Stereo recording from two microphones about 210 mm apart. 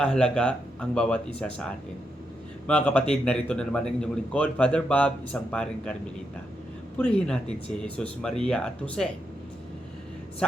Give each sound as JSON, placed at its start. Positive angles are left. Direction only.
{"t": 0.0, "sound": "a man's voice", "side_deg": 5}
{"t": 7.0, "sound": "a man's voice", "side_deg": 5}